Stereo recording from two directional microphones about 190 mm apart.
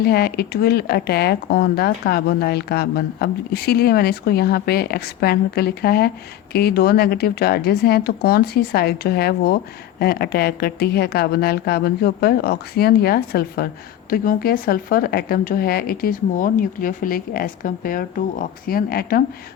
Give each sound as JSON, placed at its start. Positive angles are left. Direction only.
{"t": 0.0, "sound": "speech", "side_deg": 55}